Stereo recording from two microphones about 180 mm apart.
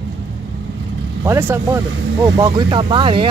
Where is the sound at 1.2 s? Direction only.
15° right (ahead or behind).